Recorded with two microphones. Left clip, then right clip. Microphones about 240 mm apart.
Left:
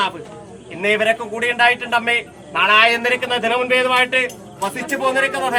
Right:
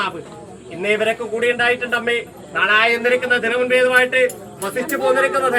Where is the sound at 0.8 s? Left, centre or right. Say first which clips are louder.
Left 2 dB; centre.